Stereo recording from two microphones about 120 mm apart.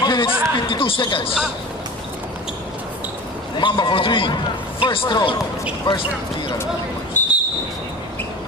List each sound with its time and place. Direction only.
0.0 s speech: 40° left (ahead or behind)
3.5 s a man's voice: 40° left (ahead or behind)
7.2 s a sound: 15° left (ahead or behind)